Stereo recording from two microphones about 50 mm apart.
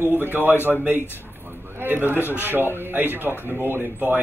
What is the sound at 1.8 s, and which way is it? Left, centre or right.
A man's voice, right.